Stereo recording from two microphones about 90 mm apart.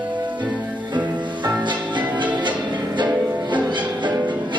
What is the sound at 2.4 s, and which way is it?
Music, 60° right (ahead or behind).